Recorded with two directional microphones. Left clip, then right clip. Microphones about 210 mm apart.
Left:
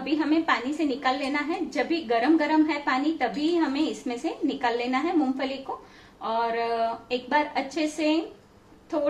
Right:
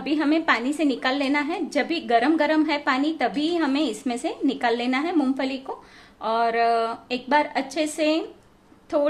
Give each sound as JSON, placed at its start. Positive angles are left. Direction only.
{"t": 0.0, "sound": "a woman's voice", "side_deg": -55}